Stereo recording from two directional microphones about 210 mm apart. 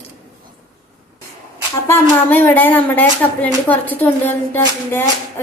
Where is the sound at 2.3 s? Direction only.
10° left (ahead or behind).